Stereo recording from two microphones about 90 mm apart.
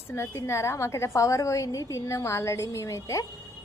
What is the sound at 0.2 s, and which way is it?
A woman's voice, 30° left (ahead or behind).